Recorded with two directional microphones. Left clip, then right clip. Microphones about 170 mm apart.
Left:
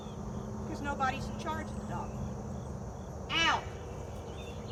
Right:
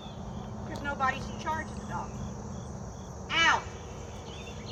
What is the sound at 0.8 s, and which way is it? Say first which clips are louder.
Speech: right 3 dB; 65° left (ahead or behind).